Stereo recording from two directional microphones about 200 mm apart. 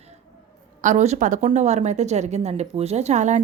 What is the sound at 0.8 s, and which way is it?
A woman's voice, 40° right (ahead or behind).